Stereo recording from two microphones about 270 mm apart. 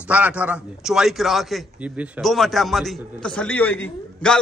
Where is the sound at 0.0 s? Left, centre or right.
Centre.